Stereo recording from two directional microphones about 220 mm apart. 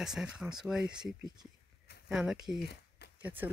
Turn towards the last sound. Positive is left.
turn(degrees=-10)  # may be behind; listen again after turning